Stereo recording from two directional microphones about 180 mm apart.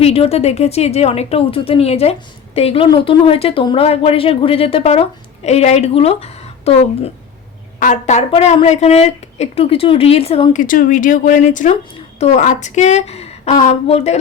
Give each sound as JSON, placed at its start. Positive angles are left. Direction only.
{"t": 0.0, "sound": "speech", "side_deg": 35}
{"t": 8.3, "sound": "speech", "side_deg": 30}
{"t": 10.6, "sound": "speech", "side_deg": 50}